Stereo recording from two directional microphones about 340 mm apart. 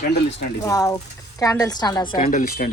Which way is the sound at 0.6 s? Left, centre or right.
Centre.